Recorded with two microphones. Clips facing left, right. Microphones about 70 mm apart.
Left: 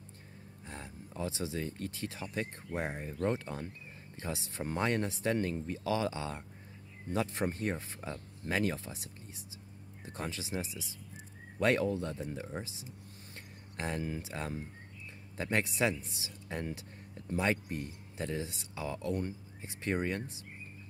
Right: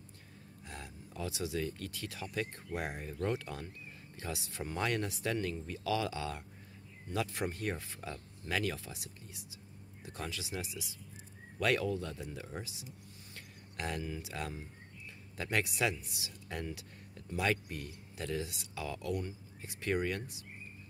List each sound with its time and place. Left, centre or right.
0.7 s speech: left
13.7 s speech: left